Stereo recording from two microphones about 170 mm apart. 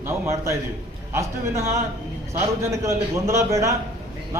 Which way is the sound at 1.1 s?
15° right (ahead or behind).